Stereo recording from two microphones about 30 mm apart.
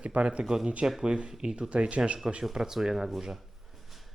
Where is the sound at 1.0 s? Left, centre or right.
Right.